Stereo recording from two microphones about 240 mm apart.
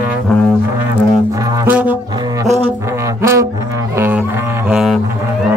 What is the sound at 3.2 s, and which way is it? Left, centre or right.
Music, centre.